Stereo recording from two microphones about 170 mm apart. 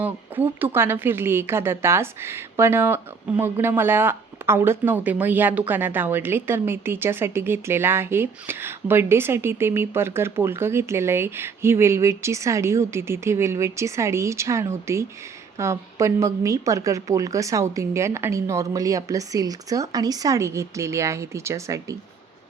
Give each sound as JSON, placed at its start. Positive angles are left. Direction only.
{"t": 0.0, "sound": "speech", "side_deg": -10}